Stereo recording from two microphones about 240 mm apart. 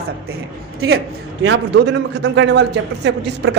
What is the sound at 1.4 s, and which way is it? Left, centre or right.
A man's voice, right.